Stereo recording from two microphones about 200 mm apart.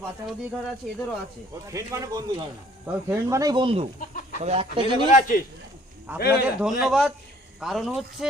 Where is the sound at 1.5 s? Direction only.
15° right (ahead or behind).